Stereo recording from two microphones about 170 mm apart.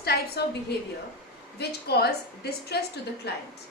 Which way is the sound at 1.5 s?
70° left (ahead or behind).